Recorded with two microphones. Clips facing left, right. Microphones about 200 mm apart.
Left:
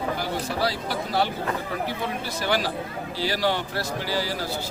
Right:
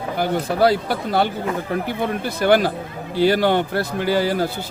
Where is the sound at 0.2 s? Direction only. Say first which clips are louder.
Right 9 dB; 55° right (ahead or behind).